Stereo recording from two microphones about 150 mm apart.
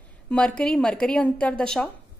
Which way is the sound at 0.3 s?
5° left (ahead or behind).